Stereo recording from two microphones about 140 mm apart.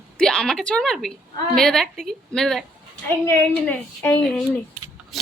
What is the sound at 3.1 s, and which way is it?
A woman's voice, 15° left (ahead or behind).